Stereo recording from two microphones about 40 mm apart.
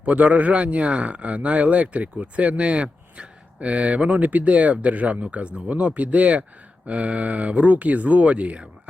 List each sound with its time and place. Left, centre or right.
0.0 s a man's voice: right